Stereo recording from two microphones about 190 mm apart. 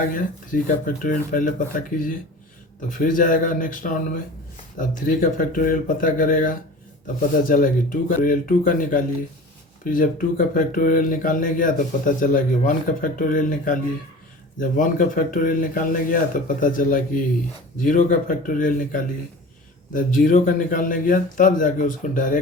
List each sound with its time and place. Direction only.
0.0 s speech: 45° left (ahead or behind)